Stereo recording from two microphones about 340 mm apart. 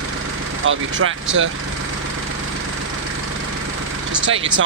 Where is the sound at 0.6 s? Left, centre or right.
Right.